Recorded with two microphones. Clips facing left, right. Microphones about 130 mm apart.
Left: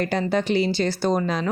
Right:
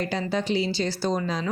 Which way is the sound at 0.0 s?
55° left (ahead or behind).